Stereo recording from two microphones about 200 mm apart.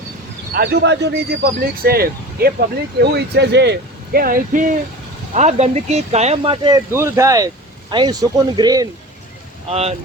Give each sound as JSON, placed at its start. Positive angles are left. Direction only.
{"t": 0.5, "sound": "speech", "side_deg": -50}
{"t": 9.6, "sound": "speech", "side_deg": -30}